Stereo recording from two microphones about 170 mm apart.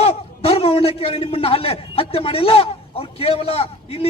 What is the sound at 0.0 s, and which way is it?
A man's voice, 35° left (ahead or behind).